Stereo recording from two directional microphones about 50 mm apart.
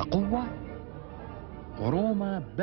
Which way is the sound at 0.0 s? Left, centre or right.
Centre.